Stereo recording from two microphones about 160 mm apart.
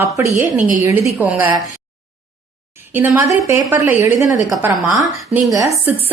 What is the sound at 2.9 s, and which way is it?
A woman's voice, 15° right (ahead or behind).